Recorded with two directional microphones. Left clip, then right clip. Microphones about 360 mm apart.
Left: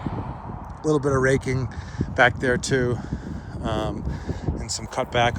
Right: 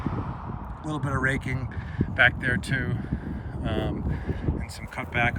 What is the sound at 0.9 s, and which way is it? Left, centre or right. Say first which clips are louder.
Speech: left 7 dB; centre.